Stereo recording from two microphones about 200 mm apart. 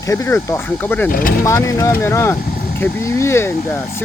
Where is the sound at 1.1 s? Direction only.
45° left (ahead or behind).